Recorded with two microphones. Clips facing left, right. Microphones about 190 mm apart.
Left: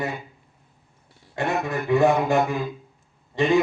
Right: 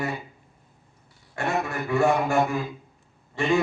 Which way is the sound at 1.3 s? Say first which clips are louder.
Left 2 dB; 20° left (ahead or behind).